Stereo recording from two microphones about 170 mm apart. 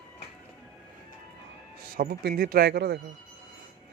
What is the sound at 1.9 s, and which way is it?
Speech, 65° right (ahead or behind).